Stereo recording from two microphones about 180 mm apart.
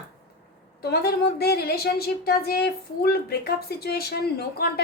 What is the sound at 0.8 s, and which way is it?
A woman's voice, 65° left (ahead or behind).